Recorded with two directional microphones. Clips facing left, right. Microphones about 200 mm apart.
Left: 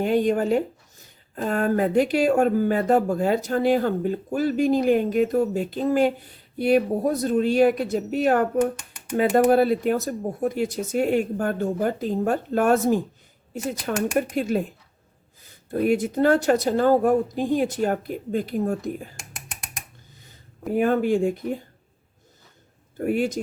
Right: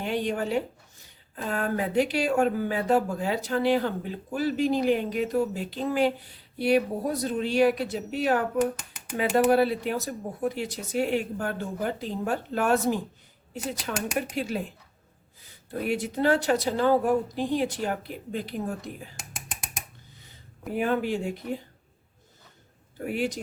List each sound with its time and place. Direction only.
0.0 s speech: 45° left (ahead or behind)
15.9 s speech: 45° left (ahead or behind)
20.7 s speech: 45° left (ahead or behind)
23.0 s speech: 45° left (ahead or behind)